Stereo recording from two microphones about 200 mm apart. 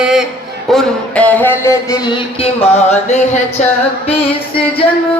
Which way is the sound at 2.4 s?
30° left (ahead or behind).